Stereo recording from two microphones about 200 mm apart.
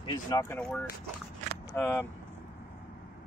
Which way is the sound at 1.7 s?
10° left (ahead or behind).